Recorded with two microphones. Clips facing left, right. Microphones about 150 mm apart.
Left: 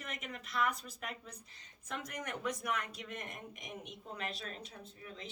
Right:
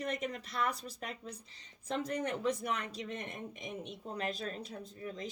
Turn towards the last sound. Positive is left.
turn(degrees=-40)  # may be behind; listen again after turning